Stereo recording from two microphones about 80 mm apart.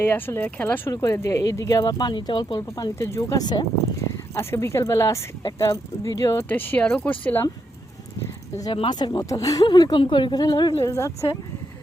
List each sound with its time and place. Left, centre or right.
0.0 s speech: left
0.9 s speech: left
3.1 s speech: left
4.4 s speech: left
6.5 s speech: left
8.7 s speech: left
9.6 s speech: left
10.8 s speech: left